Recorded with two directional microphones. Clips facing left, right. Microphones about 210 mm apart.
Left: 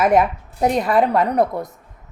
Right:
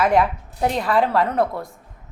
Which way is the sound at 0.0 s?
20° left (ahead or behind).